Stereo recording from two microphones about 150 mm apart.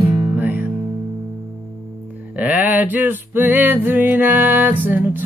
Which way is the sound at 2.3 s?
10° right (ahead or behind).